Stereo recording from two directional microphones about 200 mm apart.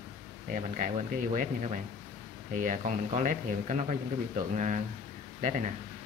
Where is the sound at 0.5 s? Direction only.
40° right (ahead or behind).